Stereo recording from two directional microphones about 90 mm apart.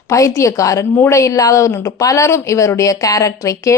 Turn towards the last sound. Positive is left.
turn(degrees=35)  # may be behind; listen again after turning